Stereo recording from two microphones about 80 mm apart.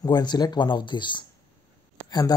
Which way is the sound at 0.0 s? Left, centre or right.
Left.